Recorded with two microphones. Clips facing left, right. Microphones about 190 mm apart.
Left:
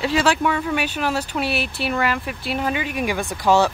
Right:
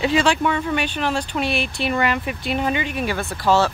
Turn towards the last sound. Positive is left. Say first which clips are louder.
# left 1 dB
turn(degrees=15)  # may be behind; listen again after turning